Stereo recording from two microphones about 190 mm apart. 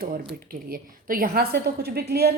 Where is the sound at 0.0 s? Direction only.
50° right (ahead or behind).